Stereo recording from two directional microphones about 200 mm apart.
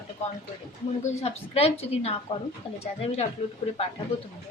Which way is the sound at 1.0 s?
30° left (ahead or behind).